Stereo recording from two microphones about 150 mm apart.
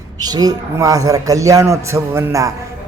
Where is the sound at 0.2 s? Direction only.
25° right (ahead or behind).